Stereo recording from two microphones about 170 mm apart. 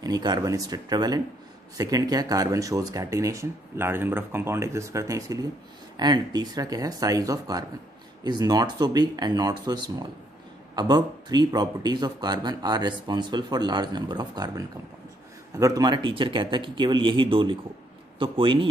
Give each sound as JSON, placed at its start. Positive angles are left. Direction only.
{"t": 0.0, "sound": "a man's voice", "side_deg": -25}